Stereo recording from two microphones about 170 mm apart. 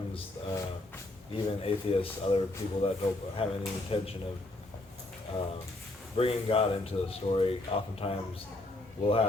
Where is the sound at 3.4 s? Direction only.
35° left (ahead or behind).